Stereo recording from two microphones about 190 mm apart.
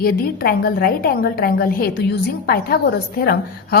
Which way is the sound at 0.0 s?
55° left (ahead or behind).